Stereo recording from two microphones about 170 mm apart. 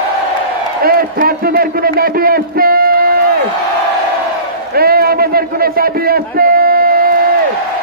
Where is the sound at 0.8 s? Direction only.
60° right (ahead or behind).